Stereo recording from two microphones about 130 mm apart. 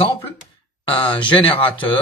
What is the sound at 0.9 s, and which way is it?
Speech, 40° left (ahead or behind).